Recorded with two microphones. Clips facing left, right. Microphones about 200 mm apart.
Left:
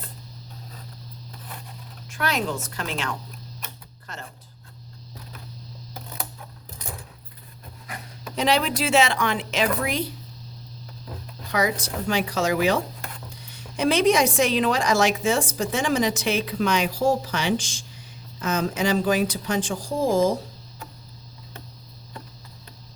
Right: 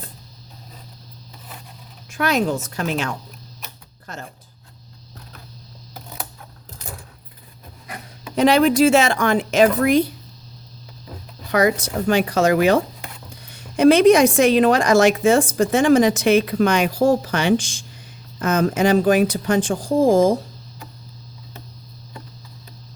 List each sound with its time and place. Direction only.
2.0 s speech: 45° right (ahead or behind)
4.0 s a sound: 45° right (ahead or behind)
8.4 s speech: 50° right (ahead or behind)
11.5 s a woman's voice: 55° right (ahead or behind)